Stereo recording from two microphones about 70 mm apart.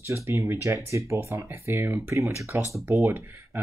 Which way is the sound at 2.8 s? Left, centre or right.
Right.